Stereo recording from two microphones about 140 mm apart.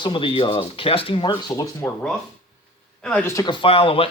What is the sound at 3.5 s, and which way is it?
Speech, 40° left (ahead or behind).